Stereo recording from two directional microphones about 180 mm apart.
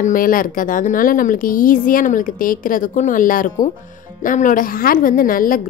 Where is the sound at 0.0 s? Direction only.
50° left (ahead or behind).